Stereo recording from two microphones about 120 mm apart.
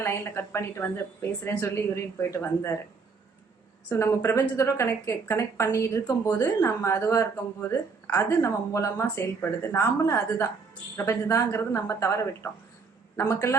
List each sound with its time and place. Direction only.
0.0 s a woman's voice: 20° left (ahead or behind)
3.8 s a woman's voice: 20° left (ahead or behind)